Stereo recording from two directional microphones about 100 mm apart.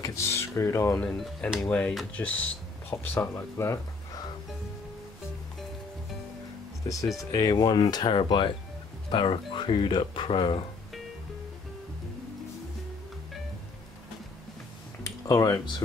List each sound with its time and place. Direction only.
0.0 s speech: 30° left (ahead or behind)
1.2 s speech: 5° left (ahead or behind)
2.9 s speech: 25° left (ahead or behind)
6.9 s speech: 30° left (ahead or behind); by 10.6 s 60° left (ahead or behind)
15.2 s speech: 35° left (ahead or behind)